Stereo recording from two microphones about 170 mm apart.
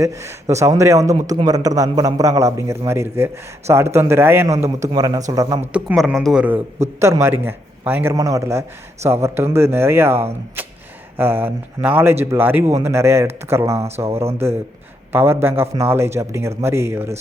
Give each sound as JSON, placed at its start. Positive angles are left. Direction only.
{"t": 0.0, "sound": "a man's voice", "side_deg": -15}
{"t": 5.7, "sound": "a man's voice", "side_deg": -5}
{"t": 13.7, "sound": "speech", "side_deg": -40}
{"t": 14.0, "sound": "a man's voice", "side_deg": -15}